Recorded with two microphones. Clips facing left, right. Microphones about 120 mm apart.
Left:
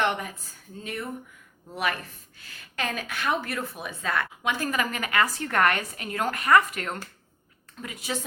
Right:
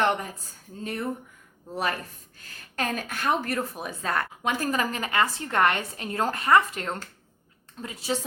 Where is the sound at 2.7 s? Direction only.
40° right (ahead or behind).